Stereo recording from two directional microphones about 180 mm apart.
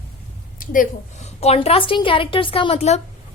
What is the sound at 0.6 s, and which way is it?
A woman's voice, 50° left (ahead or behind).